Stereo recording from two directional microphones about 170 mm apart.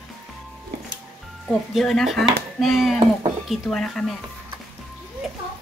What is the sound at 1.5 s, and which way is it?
Speech, centre (ahead or behind).